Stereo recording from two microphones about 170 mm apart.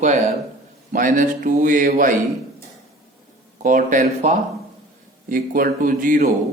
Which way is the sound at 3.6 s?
50° right (ahead or behind).